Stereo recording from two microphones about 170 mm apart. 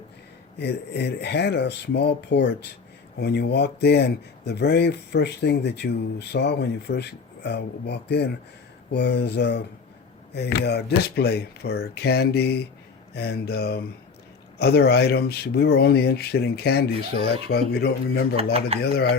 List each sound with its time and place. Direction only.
0.6 s speech: 75° left (ahead or behind)